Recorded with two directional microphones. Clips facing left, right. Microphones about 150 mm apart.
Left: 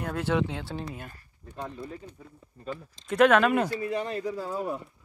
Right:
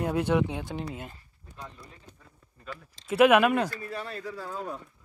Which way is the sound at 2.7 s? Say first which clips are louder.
Left 5 dB; 35° left (ahead or behind).